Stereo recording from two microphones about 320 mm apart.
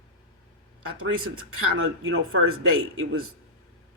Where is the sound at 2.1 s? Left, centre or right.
Right.